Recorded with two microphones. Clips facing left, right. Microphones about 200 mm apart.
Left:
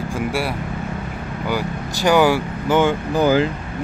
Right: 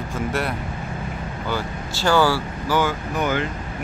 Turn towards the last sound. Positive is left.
turn(degrees=30)  # may be behind; listen again after turning